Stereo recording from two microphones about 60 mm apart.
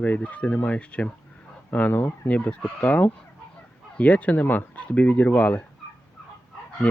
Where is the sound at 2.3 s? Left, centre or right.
Left.